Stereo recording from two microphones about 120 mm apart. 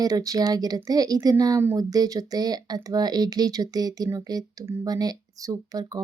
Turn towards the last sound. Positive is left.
turn(degrees=-30)  # may be behind; listen again after turning